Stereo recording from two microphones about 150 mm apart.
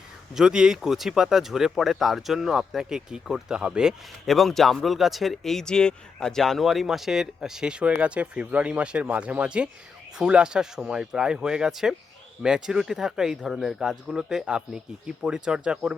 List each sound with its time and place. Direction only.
0.3 s speech: 5° right (ahead or behind)